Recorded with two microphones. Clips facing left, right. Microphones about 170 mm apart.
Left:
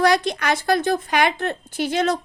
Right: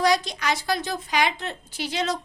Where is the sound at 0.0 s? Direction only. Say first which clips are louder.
Left 4 dB; 60° left (ahead or behind).